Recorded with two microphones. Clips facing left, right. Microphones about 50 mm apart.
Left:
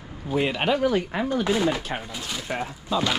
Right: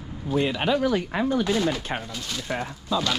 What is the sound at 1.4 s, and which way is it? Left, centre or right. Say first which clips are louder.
Speech: left 1 dB; left.